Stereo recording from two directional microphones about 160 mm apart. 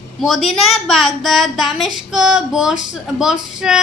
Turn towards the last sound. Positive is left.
turn(degrees=-5)  # may be behind; listen again after turning